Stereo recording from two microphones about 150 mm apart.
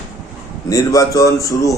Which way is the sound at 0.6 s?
20° left (ahead or behind).